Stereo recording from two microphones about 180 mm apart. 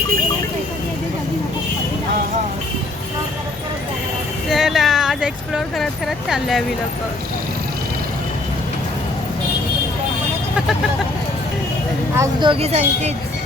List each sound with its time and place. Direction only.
4.4 s speech: centre (ahead or behind)
12.1 s speech: 20° right (ahead or behind)
12.5 s speech: 35° right (ahead or behind)